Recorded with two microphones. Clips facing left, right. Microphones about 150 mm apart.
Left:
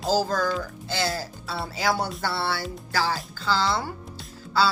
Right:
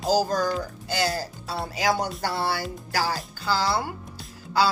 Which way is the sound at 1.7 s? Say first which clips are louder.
Right 1 dB; 15° right (ahead or behind).